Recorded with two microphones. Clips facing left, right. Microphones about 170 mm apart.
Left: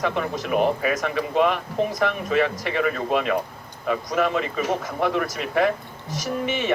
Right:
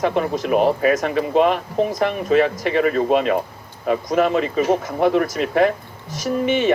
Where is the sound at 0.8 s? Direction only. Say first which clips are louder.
Right 6 dB; 35° right (ahead or behind).